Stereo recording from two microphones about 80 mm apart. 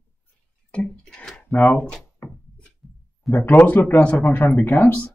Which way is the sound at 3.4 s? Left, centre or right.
Left.